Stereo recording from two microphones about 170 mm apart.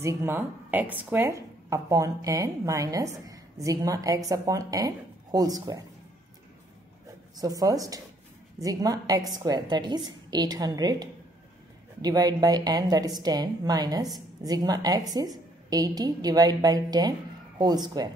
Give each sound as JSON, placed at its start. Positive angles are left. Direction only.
{"t": 0.0, "sound": "a woman's voice", "side_deg": -15}
{"t": 7.3, "sound": "a woman's voice", "side_deg": -20}